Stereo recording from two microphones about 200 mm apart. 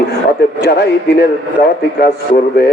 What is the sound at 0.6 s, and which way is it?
A man's voice, 55° left (ahead or behind).